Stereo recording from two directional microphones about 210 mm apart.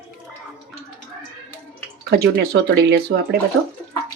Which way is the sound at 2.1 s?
50° right (ahead or behind).